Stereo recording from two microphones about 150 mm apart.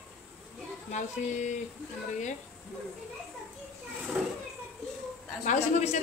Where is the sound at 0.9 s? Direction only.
55° left (ahead or behind).